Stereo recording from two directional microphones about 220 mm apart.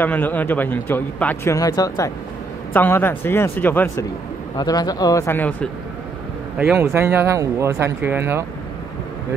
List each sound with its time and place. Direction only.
0.0 s a man's voice: 10° left (ahead or behind)
6.6 s speech: 10° right (ahead or behind)